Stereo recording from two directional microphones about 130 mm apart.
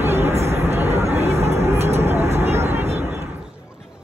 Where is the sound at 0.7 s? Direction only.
55° right (ahead or behind).